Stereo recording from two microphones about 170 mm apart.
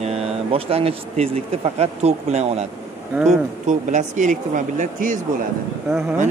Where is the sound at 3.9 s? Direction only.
45° right (ahead or behind).